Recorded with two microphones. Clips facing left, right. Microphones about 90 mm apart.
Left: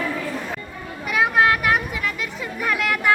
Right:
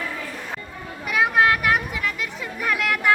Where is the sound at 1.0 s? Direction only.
Centre (ahead or behind).